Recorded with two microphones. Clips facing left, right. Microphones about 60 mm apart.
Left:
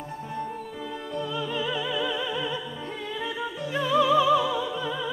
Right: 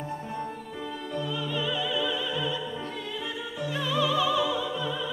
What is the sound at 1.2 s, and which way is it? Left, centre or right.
Opera, left.